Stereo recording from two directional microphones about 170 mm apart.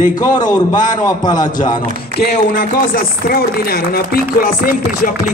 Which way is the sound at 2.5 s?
55° left (ahead or behind).